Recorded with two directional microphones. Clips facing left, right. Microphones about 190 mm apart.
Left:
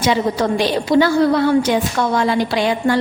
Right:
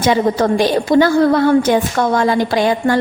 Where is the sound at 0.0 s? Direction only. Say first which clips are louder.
Right 3 dB; 50° right (ahead or behind).